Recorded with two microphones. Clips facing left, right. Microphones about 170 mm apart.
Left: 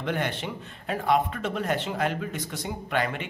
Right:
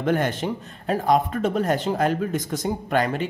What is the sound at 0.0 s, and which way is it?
Speech, 45° right (ahead or behind).